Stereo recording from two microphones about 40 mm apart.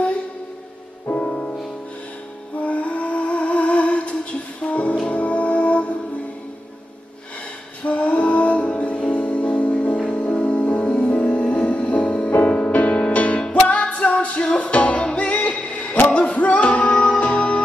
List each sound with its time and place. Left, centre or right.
1.2 s music: left
2.6 s music: left
7.8 s music: left
9.9 s music: left